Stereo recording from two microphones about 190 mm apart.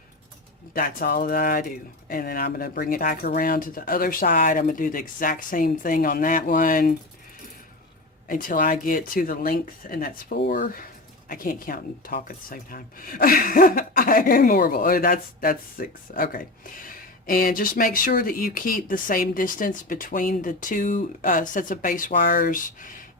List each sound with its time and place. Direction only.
0.7 s speech: 50° left (ahead or behind)
8.3 s speech: 45° left (ahead or behind)